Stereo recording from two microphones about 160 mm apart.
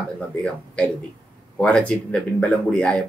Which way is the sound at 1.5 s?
5° left (ahead or behind).